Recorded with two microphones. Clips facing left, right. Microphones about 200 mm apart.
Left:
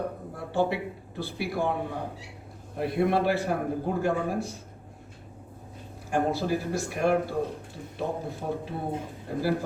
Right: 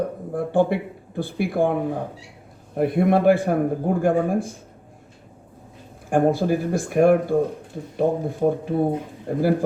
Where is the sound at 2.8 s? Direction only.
50° right (ahead or behind).